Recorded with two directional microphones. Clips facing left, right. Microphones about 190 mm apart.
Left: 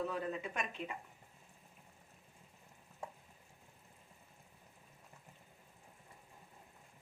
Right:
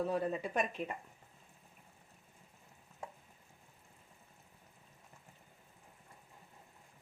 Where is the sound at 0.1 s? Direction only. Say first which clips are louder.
Right 5 dB; 35° right (ahead or behind).